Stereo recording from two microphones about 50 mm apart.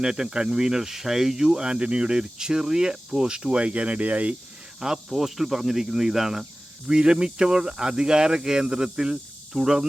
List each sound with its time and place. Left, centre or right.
0.0 s speech: centre
4.8 s speech: centre